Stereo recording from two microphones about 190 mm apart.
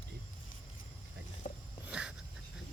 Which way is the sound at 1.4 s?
45° left (ahead or behind).